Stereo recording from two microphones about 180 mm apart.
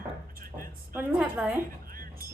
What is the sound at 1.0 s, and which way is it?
Speech, 10° right (ahead or behind).